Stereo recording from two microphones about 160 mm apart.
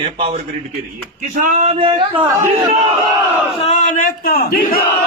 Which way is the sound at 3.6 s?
40° left (ahead or behind).